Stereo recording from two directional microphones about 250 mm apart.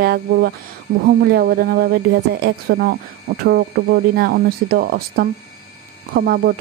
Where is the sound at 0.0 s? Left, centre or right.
Right.